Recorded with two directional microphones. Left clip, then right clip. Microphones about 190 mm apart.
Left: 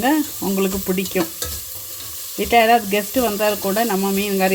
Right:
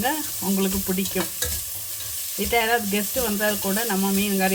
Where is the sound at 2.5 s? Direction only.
35° left (ahead or behind).